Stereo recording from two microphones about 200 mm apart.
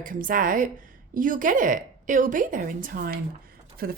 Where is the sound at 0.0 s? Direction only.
45° right (ahead or behind).